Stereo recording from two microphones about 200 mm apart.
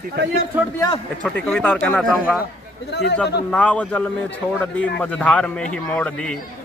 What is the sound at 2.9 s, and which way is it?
Speech, 55° left (ahead or behind).